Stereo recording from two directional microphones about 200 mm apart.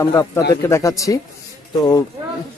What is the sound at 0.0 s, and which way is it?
Speech, 15° left (ahead or behind).